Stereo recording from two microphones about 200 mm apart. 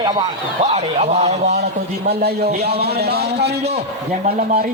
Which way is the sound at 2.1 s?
55° right (ahead or behind).